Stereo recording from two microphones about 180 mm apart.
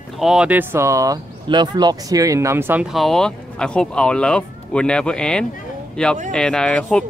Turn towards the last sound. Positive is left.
turn(degrees=5)  # may be behind; listen again after turning